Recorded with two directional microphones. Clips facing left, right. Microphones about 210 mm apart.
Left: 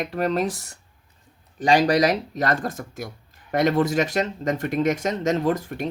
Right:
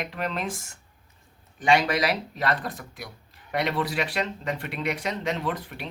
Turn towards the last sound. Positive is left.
turn(degrees=45)  # may be behind; listen again after turning